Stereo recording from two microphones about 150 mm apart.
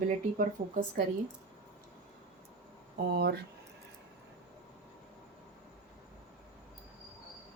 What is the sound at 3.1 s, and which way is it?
Speech, 90° right.